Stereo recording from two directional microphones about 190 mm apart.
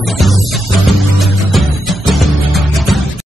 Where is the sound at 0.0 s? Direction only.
Centre (ahead or behind).